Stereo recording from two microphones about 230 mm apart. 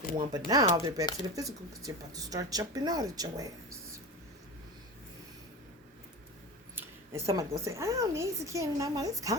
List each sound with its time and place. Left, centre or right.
0.2 s speech: centre
6.7 s speech: centre